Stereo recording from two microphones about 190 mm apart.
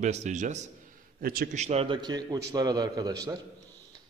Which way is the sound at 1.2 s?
50° right (ahead or behind).